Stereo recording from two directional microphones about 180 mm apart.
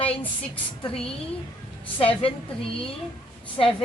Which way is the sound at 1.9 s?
30° left (ahead or behind).